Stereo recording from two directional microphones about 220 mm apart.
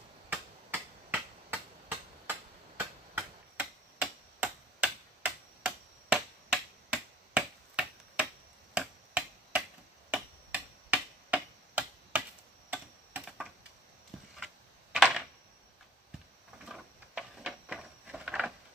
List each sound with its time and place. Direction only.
0.3 s finger snapping: 5° right (ahead or behind)
12.6 s typing: 5° right (ahead or behind)
16.6 s a sound: centre (ahead or behind)